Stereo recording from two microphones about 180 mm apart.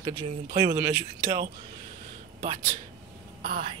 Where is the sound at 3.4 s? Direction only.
55° right (ahead or behind).